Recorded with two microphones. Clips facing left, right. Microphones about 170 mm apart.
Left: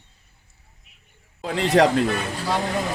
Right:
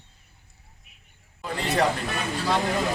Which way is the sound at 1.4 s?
90° left.